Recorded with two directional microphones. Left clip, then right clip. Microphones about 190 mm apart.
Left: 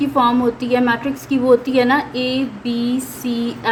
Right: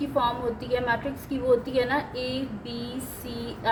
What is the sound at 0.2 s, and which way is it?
A woman's voice, 30° left (ahead or behind).